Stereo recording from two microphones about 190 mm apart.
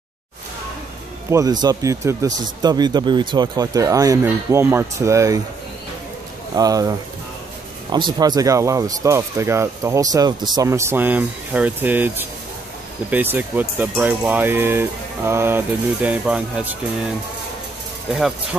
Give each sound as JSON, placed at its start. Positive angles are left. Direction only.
{"t": 1.3, "sound": "speech", "side_deg": -20}
{"t": 6.5, "sound": "speech", "side_deg": -20}